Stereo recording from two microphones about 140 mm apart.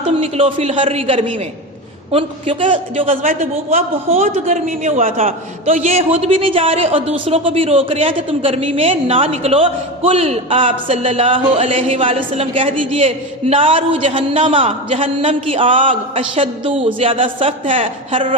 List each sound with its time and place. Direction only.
0.2 s a man's voice: 45° right (ahead or behind); by 5.1 s 65° right (ahead or behind)
5.9 s a man's voice: 45° right (ahead or behind)